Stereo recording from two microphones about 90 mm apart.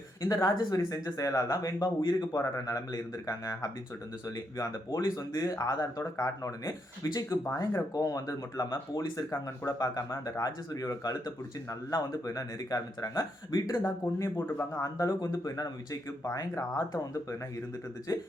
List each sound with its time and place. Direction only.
0.2 s speech: 40° left (ahead or behind)
18.1 s speech: 40° left (ahead or behind)